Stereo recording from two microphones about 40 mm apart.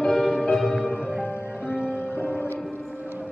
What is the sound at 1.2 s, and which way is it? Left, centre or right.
Music, left.